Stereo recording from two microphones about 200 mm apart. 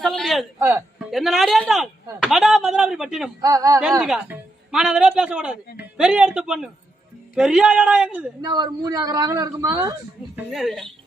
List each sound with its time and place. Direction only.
0.0 s speech: centre (ahead or behind)
0.6 s a man's voice: 10° right (ahead or behind)
1.1 s speech: centre (ahead or behind)
3.4 s speech: 15° right (ahead or behind)
4.0 s speech: 5° right (ahead or behind)
8.4 s a man's voice: 20° right (ahead or behind)
10.3 s speech: 5° right (ahead or behind)